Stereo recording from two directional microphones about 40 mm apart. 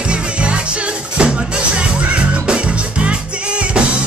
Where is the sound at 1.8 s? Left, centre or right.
Right.